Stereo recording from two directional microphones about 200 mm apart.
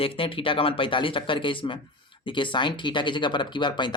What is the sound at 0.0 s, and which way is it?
Speech, 25° left (ahead or behind).